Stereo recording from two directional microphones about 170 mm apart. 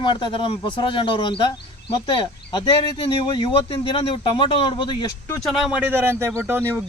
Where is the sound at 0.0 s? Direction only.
25° left (ahead or behind).